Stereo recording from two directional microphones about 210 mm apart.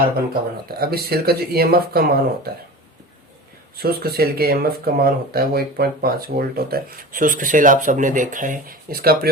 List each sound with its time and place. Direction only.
0.8 s speech: 50° right (ahead or behind)
3.8 s speech: 45° right (ahead or behind)